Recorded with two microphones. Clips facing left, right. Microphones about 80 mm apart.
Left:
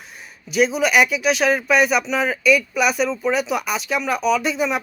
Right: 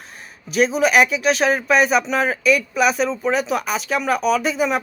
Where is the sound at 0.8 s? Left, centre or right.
Centre.